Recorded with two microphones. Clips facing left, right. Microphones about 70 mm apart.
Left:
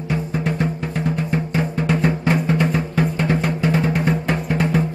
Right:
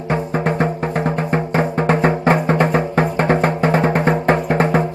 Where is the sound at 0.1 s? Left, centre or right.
Right.